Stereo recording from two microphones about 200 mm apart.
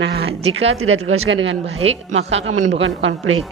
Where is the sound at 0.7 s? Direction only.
90° right.